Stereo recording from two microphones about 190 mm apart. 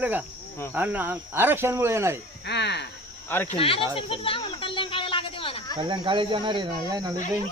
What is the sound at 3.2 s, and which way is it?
Speech, 10° left (ahead or behind).